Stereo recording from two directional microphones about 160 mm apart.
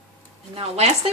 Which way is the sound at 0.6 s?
40° right (ahead or behind).